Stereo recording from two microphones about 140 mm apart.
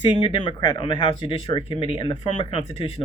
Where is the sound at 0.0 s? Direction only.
35° left (ahead or behind).